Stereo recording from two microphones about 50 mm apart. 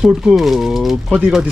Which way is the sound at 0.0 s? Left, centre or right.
Centre.